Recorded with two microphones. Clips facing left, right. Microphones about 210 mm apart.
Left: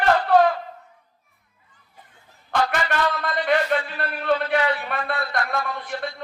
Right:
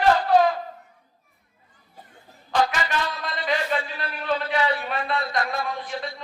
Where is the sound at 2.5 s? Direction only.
60° left (ahead or behind).